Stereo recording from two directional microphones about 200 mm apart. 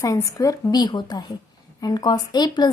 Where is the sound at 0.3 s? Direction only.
15° left (ahead or behind).